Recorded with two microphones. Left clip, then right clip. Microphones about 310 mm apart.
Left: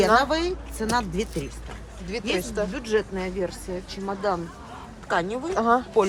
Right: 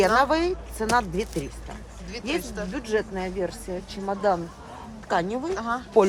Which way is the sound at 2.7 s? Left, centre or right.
Right.